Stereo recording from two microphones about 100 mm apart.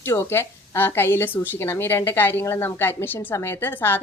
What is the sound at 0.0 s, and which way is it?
Speech, 25° left (ahead or behind).